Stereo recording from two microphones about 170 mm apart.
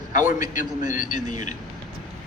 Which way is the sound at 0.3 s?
50° left (ahead or behind).